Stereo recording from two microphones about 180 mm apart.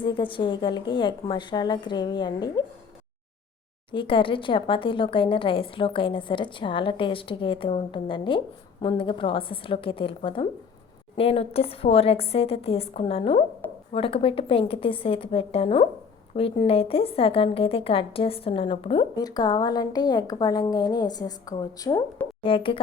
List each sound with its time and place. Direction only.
0.0 s a woman's voice: 30° left (ahead or behind)
3.9 s a woman's voice: 30° left (ahead or behind)